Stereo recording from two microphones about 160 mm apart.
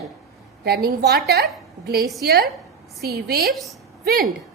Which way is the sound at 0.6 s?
80° right.